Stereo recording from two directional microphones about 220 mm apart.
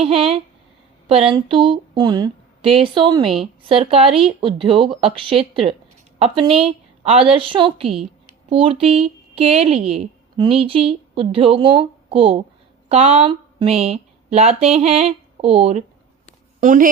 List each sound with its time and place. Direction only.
0.0 s speech: 25° right (ahead or behind)